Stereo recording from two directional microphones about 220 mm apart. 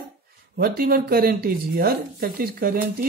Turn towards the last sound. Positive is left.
turn(degrees=-40)  # may be behind; listen again after turning